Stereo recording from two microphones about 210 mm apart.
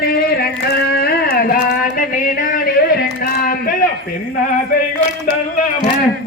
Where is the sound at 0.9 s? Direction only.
50° left (ahead or behind).